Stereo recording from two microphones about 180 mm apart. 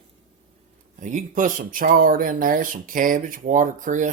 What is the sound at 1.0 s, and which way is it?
Speech, 45° right (ahead or behind).